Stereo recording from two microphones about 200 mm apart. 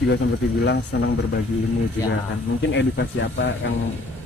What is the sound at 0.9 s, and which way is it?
Speech, 60° left (ahead or behind).